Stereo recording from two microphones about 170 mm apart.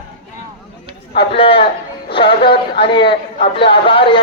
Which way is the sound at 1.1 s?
30° left (ahead or behind).